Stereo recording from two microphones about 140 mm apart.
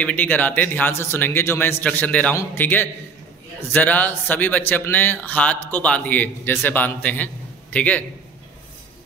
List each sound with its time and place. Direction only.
0.0 s a man's voice: 10° left (ahead or behind)